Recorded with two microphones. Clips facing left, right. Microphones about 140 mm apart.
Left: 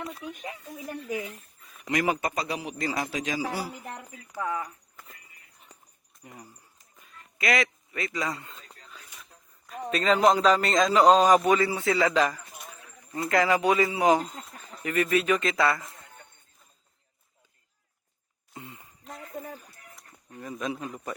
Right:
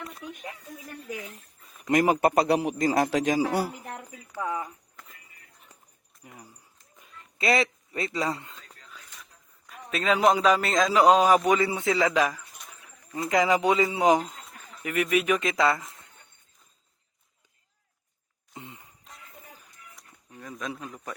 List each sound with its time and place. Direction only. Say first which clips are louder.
0.2 s a man's voice: left 2 dB; 5° left (ahead or behind)
1.9 s speech: right 5 dB; 50° right (ahead or behind)
2.3 s a man's voice: right 9 dB; 65° right (ahead or behind)
2.7 s a man's voice: right 7 dB; 45° right (ahead or behind)
3.8 s a man's voice: right 1 dB; centre (ahead or behind)
4.4 s a man's voice: even; 20° right (ahead or behind)
5.0 s a sound: left 2 dB; 5° left (ahead or behind)
6.2 s a man's voice: left 1 dB; centre (ahead or behind)
7.3 s a man's voice: right 2 dB; 30° right (ahead or behind)
9.0 s a sound: right 2 dB; 10° left (ahead or behind)
9.6 s a man's voice: left 2 dB; 5° right (ahead or behind); by 15.8 s 20° right (ahead or behind)
18.5 s a sound: even; 20° right (ahead or behind)
19.1 s a sound: left 12 dB; 50° left (ahead or behind)
20.0 s speech: left 4 dB; centre (ahead or behind)